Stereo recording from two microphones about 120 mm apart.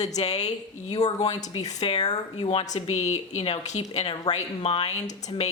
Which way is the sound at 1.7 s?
60° left (ahead or behind).